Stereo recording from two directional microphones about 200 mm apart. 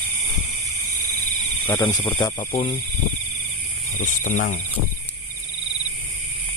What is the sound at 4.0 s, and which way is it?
Speech, 40° left (ahead or behind).